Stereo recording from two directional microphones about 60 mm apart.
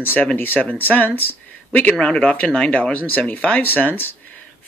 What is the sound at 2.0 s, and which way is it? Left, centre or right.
Speech, centre.